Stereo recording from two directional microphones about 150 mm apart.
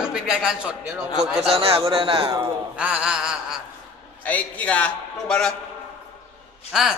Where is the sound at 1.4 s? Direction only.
40° right (ahead or behind).